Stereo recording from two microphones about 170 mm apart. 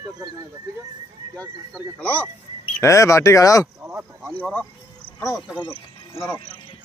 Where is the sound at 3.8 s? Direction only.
15° right (ahead or behind).